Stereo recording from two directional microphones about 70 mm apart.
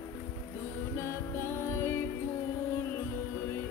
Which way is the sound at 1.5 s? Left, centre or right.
Left.